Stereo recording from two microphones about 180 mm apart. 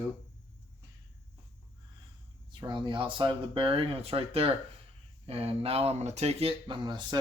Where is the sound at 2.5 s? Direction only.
25° right (ahead or behind).